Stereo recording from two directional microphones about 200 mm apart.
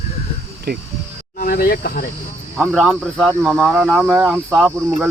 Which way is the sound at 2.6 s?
5° right (ahead or behind).